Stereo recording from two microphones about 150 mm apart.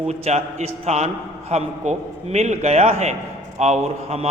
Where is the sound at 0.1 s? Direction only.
45° right (ahead or behind).